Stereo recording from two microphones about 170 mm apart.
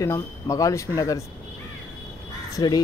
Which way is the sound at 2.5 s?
25° left (ahead or behind).